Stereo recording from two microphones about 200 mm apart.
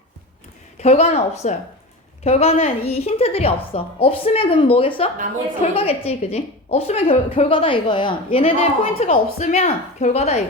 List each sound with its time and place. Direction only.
0.8 s a woman's voice: 30° left (ahead or behind)
9.0 s a woman's voice: 40° left (ahead or behind)